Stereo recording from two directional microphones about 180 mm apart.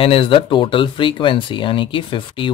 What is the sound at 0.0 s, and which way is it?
Speech, 30° left (ahead or behind).